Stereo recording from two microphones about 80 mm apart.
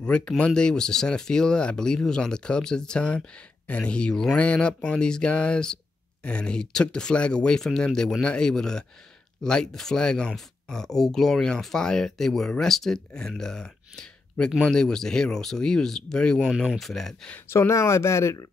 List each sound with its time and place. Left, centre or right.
0.0 s speech: centre
17.5 s speech: left